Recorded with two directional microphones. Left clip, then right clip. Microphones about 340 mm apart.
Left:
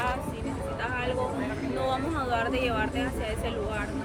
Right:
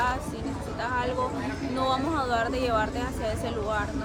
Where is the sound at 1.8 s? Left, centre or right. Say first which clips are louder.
Right 4 dB; centre.